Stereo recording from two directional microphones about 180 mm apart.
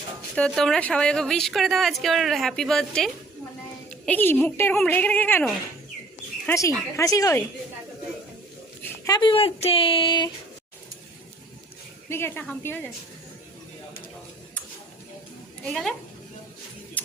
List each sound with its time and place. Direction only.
0.3 s a woman's voice: 5° left (ahead or behind)
8.8 s speech: 20° left (ahead or behind)
12.0 s a woman's voice: 15° left (ahead or behind)
15.6 s speech: 5° left (ahead or behind)